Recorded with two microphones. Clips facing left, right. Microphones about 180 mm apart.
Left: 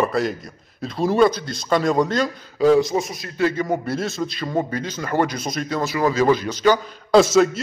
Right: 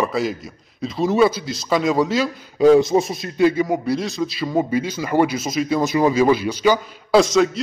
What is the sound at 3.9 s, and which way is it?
A man's voice, centre (ahead or behind).